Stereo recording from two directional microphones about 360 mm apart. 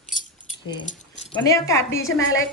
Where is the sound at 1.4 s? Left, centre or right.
Centre.